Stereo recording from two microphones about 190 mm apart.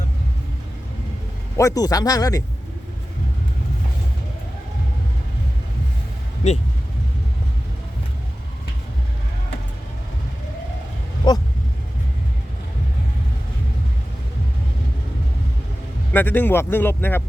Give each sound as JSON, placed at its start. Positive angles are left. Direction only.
{"t": 1.5, "sound": "speech", "side_deg": 15}
{"t": 11.3, "sound": "vehicle", "side_deg": 20}
{"t": 16.1, "sound": "speech", "side_deg": 10}